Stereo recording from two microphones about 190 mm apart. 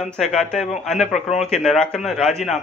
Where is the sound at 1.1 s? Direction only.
35° left (ahead or behind).